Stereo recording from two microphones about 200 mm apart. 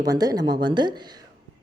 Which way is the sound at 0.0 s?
20° right (ahead or behind).